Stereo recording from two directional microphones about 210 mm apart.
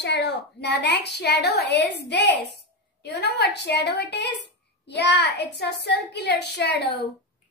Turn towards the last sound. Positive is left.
turn(degrees=55)  # may be behind; listen again after turning